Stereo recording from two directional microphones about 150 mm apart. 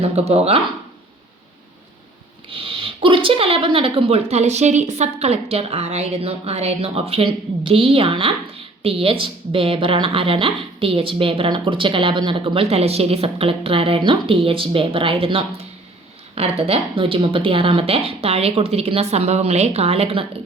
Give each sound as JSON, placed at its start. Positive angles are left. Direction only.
{"t": 0.0, "sound": "speech", "side_deg": -45}
{"t": 2.5, "sound": "speech", "side_deg": -35}